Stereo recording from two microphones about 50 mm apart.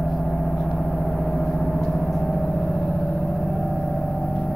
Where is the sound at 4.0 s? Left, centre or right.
Centre.